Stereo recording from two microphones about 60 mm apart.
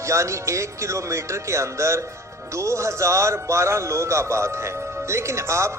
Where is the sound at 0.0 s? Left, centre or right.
Right.